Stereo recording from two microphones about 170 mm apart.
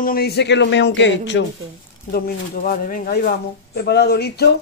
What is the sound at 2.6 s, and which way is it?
Speech, 50° left (ahead or behind).